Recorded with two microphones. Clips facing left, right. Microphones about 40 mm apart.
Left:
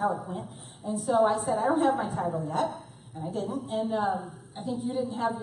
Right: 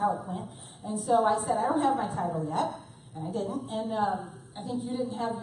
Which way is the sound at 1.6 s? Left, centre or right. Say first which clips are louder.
Left 2 dB; centre.